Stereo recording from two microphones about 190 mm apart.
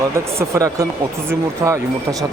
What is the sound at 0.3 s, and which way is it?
Speech, 15° right (ahead or behind).